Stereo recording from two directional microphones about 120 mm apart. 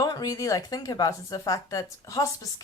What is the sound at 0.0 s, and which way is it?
Speech, 35° left (ahead or behind).